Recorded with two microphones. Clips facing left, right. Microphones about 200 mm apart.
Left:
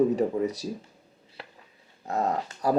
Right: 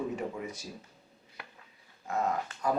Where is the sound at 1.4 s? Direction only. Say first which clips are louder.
Left 5 dB; 30° left (ahead or behind).